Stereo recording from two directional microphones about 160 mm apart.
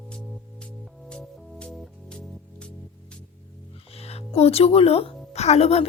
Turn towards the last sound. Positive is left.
turn(degrees=40)  # may be behind; listen again after turning